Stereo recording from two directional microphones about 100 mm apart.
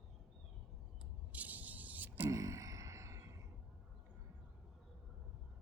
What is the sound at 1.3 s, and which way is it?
Spray, 15° right (ahead or behind).